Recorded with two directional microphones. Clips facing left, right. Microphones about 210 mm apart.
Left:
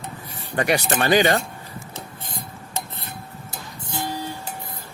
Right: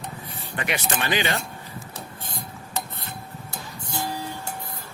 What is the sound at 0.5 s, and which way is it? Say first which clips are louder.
Speech: left 7 dB; 40° left (ahead or behind).